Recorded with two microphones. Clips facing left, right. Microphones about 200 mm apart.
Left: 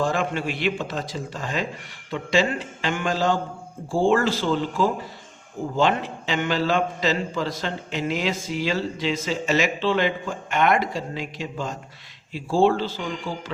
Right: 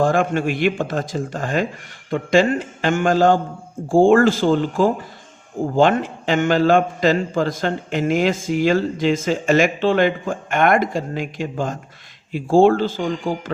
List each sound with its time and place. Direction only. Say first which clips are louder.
0.0 s a man's voice: right 6 dB; 50° right (ahead or behind)